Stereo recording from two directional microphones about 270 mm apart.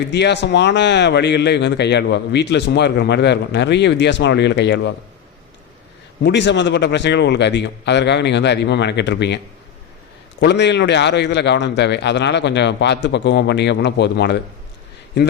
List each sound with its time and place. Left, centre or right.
0.1 s speech: left
6.2 s speech: left
10.4 s speech: left